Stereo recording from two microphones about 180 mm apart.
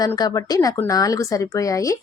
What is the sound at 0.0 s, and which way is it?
Speech, 20° left (ahead or behind).